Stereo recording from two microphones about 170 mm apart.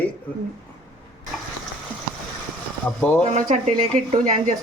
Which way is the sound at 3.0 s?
10° left (ahead or behind).